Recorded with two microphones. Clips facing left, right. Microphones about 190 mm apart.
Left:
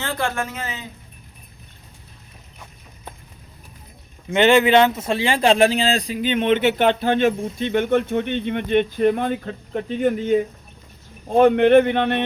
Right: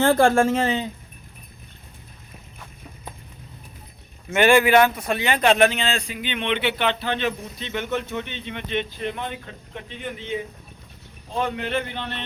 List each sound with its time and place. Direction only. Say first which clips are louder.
0.0 s speech: right 9 dB; 50° right (ahead or behind)
0.5 s a man's voice: right 10 dB; 30° right (ahead or behind)
4.3 s speech: left 2 dB; 20° left (ahead or behind); by 12.2 s 60° left (ahead or behind)